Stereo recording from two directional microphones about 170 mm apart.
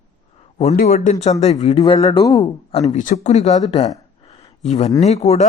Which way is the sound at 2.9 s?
45° left (ahead or behind).